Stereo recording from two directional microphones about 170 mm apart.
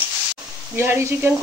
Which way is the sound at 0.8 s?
10° right (ahead or behind).